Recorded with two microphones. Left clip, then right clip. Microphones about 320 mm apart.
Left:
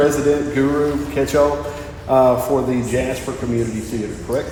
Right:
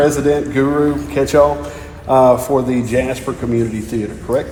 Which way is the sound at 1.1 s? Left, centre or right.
Centre.